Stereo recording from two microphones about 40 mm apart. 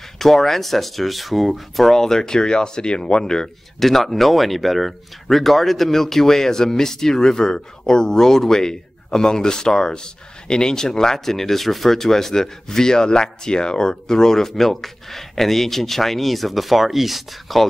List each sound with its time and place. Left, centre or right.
0.2 s speech: centre
2.0 s speech: centre
3.8 s speech: centre